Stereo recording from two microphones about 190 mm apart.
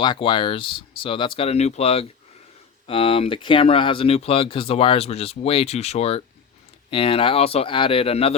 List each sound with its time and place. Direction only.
0.0 s speech: 25° left (ahead or behind)